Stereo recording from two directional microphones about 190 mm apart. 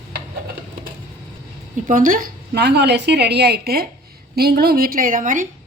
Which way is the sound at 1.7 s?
45° right (ahead or behind).